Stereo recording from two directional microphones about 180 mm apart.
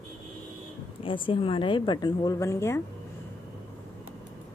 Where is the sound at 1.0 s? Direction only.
30° left (ahead or behind).